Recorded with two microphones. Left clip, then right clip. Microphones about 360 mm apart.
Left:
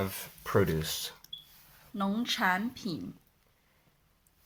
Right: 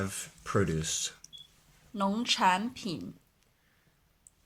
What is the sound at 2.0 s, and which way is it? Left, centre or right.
Speech, centre.